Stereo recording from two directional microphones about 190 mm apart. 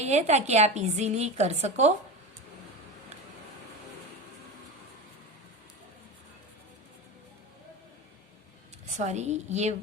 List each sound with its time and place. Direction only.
0.0 s a woman's voice: 35° right (ahead or behind)
8.9 s a woman's voice: 40° right (ahead or behind)